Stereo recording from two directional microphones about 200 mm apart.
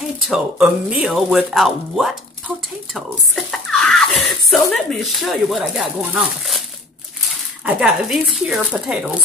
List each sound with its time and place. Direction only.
0.2 s speech: 5° right (ahead or behind)
7.6 s speech: 5° right (ahead or behind)